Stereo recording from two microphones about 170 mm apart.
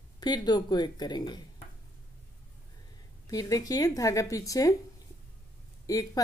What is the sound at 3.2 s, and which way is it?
Speech, 20° left (ahead or behind).